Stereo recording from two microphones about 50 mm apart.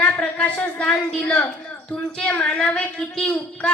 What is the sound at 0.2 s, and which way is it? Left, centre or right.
Speech, left.